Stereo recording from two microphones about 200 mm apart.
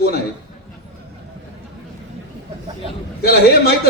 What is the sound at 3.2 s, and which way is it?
Speech, 50° left (ahead or behind).